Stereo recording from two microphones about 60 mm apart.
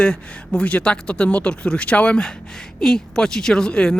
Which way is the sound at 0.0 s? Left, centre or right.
Centre.